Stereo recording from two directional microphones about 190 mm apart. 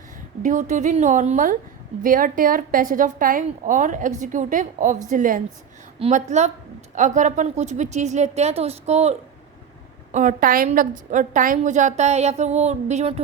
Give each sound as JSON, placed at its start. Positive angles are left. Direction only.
{"t": 0.4, "sound": "a woman's voice", "side_deg": -40}